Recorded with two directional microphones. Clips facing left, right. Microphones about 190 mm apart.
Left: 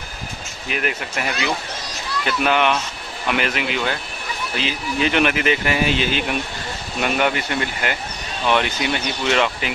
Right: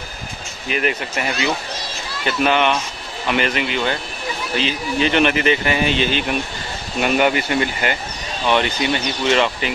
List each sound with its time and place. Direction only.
0.7 s speech: centre (ahead or behind)